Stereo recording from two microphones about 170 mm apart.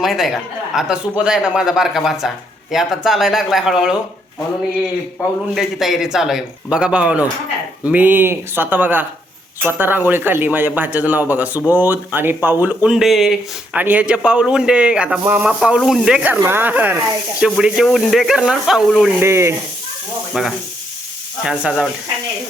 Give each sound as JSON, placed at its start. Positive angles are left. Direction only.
{"t": 0.0, "sound": "speech", "side_deg": 0}
{"t": 5.5, "sound": "speech", "side_deg": 0}
{"t": 19.2, "sound": "speech", "side_deg": -15}
{"t": 20.4, "sound": "speech", "side_deg": -5}